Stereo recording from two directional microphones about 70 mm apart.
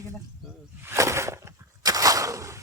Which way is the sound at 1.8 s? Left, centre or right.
Right.